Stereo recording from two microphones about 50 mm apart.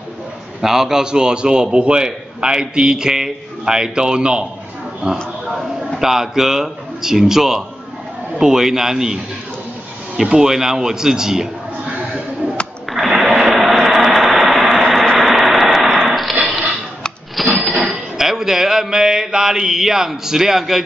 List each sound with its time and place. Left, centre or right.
0.6 s a man's voice: centre
5.1 s a sound: centre
5.9 s a man's voice: centre
13.1 s vehicle: centre
16.1 s dog: centre
17.4 s a sound: centre